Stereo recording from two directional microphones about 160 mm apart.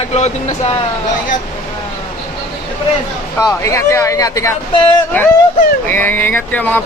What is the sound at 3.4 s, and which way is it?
Speech, 20° left (ahead or behind).